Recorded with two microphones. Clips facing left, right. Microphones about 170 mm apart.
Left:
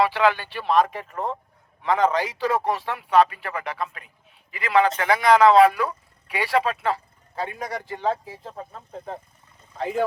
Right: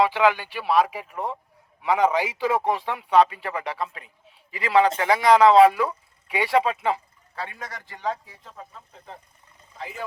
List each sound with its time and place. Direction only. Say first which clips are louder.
0.0 s speech: even; 15° right (ahead or behind)
7.3 s speech: left 5 dB; 35° left (ahead or behind)
7.6 s speech: left 5 dB; 20° left (ahead or behind)
9.7 s speech: left 10 dB; 55° left (ahead or behind)